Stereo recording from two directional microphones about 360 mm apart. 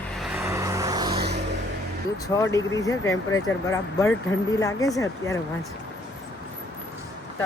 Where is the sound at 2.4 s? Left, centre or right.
Centre.